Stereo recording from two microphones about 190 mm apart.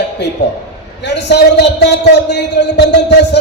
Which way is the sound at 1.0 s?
65° left (ahead or behind).